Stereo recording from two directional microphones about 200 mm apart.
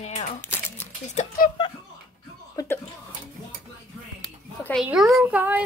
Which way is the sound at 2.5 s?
15° left (ahead or behind).